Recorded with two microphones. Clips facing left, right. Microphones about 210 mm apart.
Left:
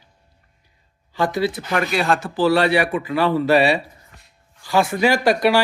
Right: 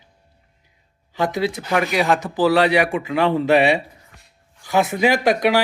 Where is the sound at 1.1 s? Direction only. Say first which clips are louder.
Left 1 dB; 20° right (ahead or behind).